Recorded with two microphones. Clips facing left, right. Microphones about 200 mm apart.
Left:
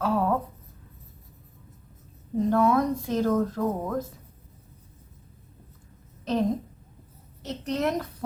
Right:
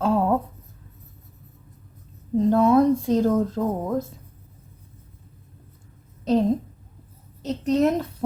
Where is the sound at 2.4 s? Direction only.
25° right (ahead or behind).